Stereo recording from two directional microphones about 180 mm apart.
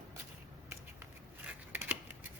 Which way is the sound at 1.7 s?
10° right (ahead or behind).